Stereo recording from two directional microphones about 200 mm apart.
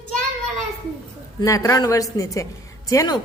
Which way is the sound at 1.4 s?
15° left (ahead or behind).